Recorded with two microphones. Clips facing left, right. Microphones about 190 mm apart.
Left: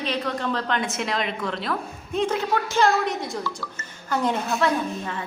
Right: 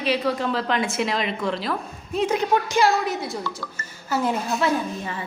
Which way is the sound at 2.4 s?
15° right (ahead or behind).